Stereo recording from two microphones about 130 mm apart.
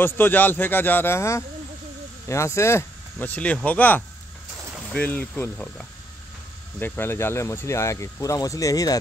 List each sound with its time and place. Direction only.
0.0 s a man's voice: 15° left (ahead or behind)